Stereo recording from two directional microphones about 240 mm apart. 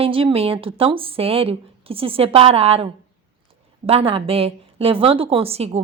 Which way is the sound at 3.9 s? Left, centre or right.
Right.